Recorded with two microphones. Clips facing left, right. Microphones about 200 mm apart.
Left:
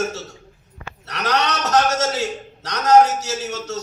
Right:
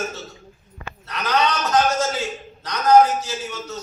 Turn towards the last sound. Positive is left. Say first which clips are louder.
# left 4 dB
turn(degrees=75)  # may be behind; listen again after turning